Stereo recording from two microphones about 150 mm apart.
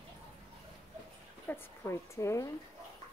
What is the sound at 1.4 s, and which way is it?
A woman's voice, 15° left (ahead or behind).